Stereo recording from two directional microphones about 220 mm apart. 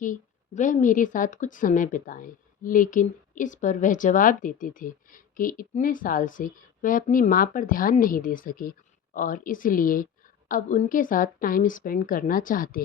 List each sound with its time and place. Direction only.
0.0 s speech: 35° left (ahead or behind)